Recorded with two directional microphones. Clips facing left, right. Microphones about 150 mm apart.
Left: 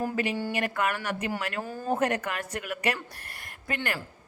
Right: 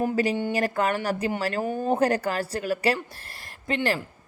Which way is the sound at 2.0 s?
35° right (ahead or behind).